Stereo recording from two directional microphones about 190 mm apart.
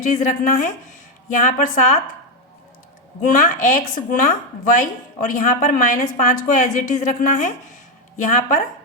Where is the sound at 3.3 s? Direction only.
40° left (ahead or behind).